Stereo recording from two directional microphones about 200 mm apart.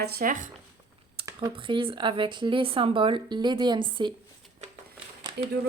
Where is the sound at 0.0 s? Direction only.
45° right (ahead or behind).